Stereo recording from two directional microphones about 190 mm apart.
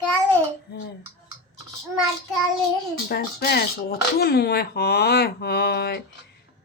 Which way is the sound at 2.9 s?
55° left (ahead or behind).